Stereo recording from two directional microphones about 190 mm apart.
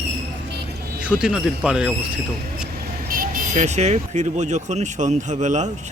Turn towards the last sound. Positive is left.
turn(degrees=-40)  # may be behind; listen again after turning